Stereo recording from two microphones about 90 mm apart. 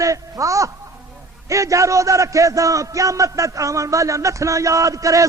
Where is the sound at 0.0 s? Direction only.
40° right (ahead or behind).